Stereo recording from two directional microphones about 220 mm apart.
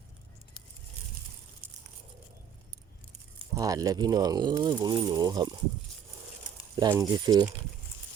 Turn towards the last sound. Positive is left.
turn(degrees=-15)  # may be behind; listen again after turning